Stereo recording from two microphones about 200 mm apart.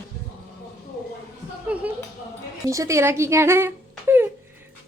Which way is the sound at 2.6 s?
15° right (ahead or behind).